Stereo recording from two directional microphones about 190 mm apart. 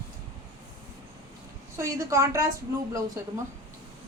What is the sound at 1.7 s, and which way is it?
Speech, 15° right (ahead or behind).